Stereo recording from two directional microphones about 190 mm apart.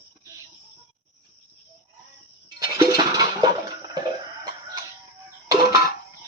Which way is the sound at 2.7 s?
15° right (ahead or behind).